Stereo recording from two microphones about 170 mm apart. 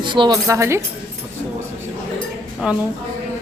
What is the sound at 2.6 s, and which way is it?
Speech, 5° right (ahead or behind).